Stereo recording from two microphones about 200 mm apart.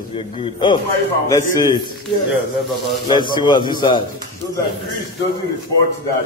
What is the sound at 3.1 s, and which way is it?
Speech, 20° left (ahead or behind).